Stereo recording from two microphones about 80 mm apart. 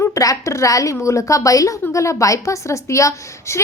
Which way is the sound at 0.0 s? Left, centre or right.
Left.